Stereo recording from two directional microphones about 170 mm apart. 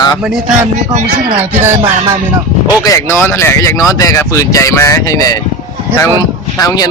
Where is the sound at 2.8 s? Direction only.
15° left (ahead or behind).